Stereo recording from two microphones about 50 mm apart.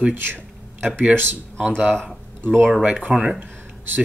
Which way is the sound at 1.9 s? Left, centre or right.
Centre.